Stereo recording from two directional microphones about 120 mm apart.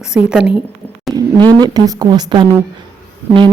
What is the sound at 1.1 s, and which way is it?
A woman's voice, 35° right (ahead or behind).